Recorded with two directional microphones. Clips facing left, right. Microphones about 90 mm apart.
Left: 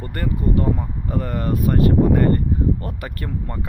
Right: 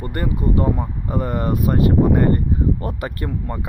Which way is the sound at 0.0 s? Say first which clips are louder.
Right 1 dB; 20° right (ahead or behind).